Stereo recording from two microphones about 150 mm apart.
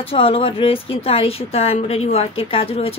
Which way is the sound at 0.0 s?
40° left (ahead or behind).